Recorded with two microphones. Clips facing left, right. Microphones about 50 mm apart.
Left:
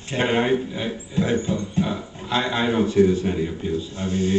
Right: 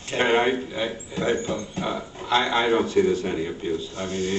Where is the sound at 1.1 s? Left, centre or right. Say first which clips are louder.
Left 3 dB; right.